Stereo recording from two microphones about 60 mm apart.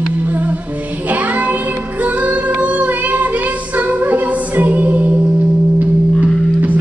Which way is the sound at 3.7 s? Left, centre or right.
Right.